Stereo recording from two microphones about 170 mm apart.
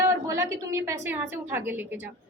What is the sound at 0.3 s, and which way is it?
A woman's voice, 15° right (ahead or behind).